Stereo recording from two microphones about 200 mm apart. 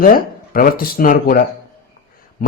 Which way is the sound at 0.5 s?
45° left (ahead or behind).